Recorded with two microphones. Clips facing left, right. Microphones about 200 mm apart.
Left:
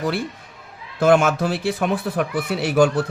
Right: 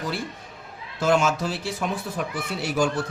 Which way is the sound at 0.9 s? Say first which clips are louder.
Left 6 dB; 60° left (ahead or behind).